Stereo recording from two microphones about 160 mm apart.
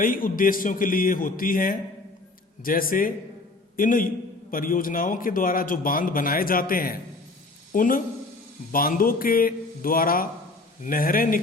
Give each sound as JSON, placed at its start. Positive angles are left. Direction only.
{"t": 0.0, "sound": "a man's voice", "side_deg": 60}